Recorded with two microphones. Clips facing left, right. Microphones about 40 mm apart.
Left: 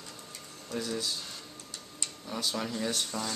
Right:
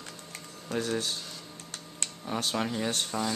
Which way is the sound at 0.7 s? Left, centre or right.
Right.